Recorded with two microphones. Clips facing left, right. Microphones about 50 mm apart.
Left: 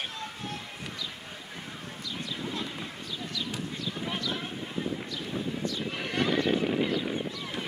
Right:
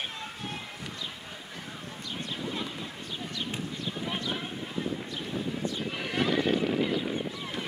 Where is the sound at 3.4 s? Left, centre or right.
Right.